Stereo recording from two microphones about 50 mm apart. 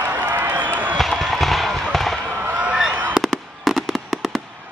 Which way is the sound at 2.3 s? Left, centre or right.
Right.